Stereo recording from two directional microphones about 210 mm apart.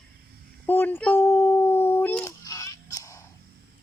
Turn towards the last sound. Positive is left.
turn(degrees=15)  # may be behind; listen again after turning